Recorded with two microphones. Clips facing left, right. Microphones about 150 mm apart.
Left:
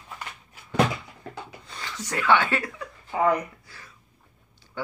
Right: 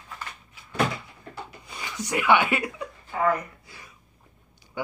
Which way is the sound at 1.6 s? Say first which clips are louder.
Right 2 dB; 10° right (ahead or behind).